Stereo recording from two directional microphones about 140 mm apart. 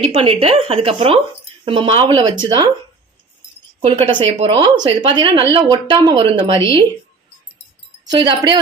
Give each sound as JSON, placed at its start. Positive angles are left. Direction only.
{"t": 0.0, "sound": "speech", "side_deg": -45}
{"t": 3.8, "sound": "speech", "side_deg": -40}
{"t": 8.1, "sound": "speech", "side_deg": -30}